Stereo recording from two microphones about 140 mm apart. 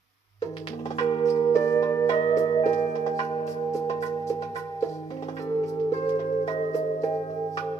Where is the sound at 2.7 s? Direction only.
25° left (ahead or behind).